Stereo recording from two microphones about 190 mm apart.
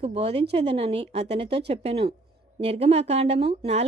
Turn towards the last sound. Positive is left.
turn(degrees=-35)  # may be behind; listen again after turning